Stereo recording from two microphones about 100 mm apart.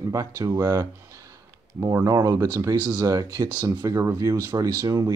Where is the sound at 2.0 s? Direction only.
35° right (ahead or behind).